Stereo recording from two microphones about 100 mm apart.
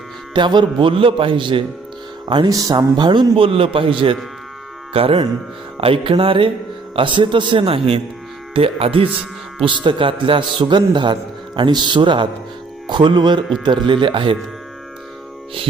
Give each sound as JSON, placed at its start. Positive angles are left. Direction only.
{"t": 0.3, "sound": "a man's voice", "side_deg": -50}
{"t": 2.5, "sound": "a man's voice", "side_deg": -35}
{"t": 3.3, "sound": "a man's voice", "side_deg": -65}
{"t": 9.6, "sound": "a man's voice", "side_deg": -55}